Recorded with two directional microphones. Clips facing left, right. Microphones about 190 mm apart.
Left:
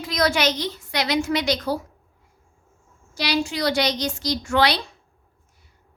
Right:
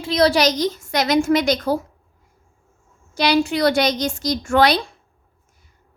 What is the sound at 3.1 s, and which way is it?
A woman's voice, 55° right (ahead or behind).